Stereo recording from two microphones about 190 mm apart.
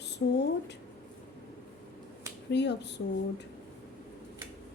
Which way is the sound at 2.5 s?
65° left (ahead or behind).